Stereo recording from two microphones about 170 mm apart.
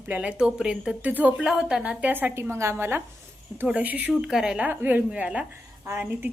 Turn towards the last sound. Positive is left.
turn(degrees=-15)  # may be behind; listen again after turning